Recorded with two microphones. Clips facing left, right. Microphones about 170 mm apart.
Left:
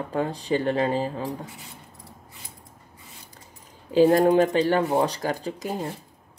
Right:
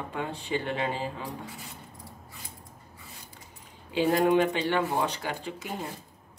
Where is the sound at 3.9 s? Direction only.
40° left (ahead or behind).